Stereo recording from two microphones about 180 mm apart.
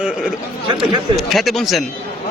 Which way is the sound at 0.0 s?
5° right (ahead or behind).